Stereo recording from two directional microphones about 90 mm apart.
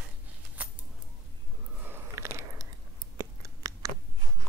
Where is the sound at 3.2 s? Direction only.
40° right (ahead or behind).